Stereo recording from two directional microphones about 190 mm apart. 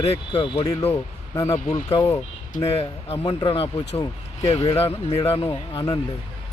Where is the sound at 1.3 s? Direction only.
15° left (ahead or behind).